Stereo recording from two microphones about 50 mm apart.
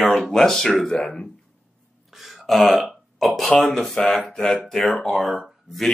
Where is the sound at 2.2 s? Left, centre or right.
Centre.